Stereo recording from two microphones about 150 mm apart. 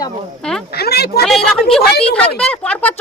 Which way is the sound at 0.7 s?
90° left.